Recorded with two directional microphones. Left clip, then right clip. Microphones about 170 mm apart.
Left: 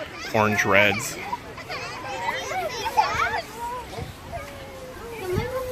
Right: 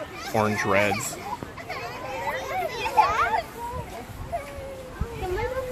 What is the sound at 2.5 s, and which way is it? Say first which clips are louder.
Children playing: right 2 dB; 25° right (ahead or behind).